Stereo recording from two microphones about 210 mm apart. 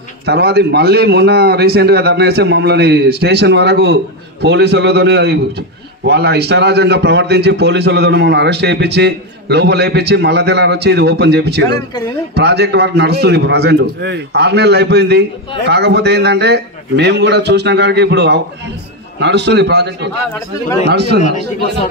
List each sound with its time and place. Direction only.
0.2 s a man's voice: 50° right (ahead or behind)